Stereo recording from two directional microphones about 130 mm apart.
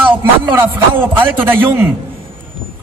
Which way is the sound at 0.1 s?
15° right (ahead or behind).